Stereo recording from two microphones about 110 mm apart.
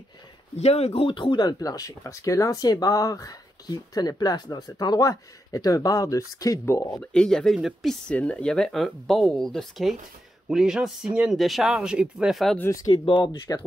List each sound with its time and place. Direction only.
0.6 s speech: 75° left (ahead or behind); by 6.9 s 25° left (ahead or behind)
7.0 s speech: 10° left (ahead or behind)
8.1 s speech: 10° left (ahead or behind)
12.5 s speech: 25° left (ahead or behind)
12.9 s speech: 55° left (ahead or behind)